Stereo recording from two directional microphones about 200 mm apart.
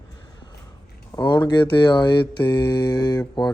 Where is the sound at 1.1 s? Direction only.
20° left (ahead or behind).